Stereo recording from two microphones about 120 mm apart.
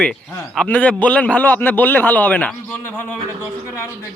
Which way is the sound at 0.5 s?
10° left (ahead or behind).